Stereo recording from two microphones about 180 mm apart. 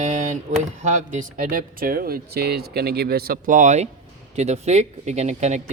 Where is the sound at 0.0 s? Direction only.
45° right (ahead or behind).